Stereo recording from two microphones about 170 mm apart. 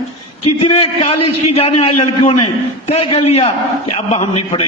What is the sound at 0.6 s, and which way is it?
A man's voice, 35° left (ahead or behind).